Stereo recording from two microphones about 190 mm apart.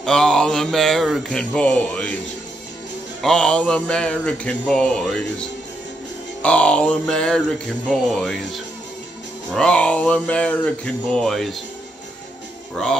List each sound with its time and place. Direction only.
0.0 s speech: 5° left (ahead or behind)
3.2 s speech: 5° left (ahead or behind)
9.5 s speech: 5° left (ahead or behind)